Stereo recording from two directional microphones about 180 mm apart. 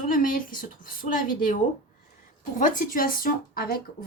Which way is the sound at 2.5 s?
45° left (ahead or behind).